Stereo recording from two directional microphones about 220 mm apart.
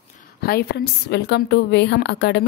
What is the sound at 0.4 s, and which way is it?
Speech, 45° left (ahead or behind).